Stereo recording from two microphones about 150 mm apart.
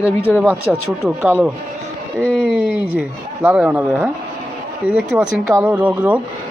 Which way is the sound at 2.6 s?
10° right (ahead or behind).